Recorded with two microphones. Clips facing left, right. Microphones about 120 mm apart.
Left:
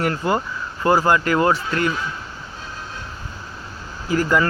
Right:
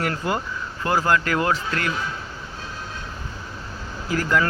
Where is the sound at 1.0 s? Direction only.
10° left (ahead or behind).